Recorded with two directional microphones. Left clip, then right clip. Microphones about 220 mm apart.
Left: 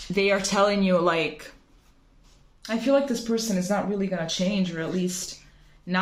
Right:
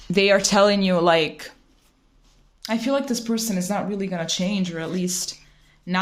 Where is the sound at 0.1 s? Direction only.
40° right (ahead or behind).